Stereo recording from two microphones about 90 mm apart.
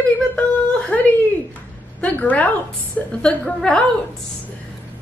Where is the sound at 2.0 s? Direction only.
15° left (ahead or behind).